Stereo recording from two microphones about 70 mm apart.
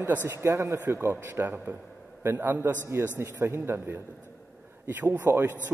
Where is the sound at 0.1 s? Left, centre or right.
Right.